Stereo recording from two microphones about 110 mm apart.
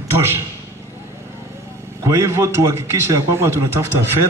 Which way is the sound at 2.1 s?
25° right (ahead or behind).